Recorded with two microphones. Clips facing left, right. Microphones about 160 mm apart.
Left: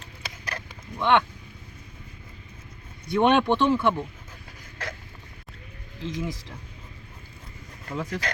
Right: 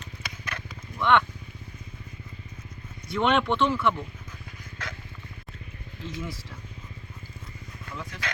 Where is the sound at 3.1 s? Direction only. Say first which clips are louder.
Left 4 dB; 25° left (ahead or behind).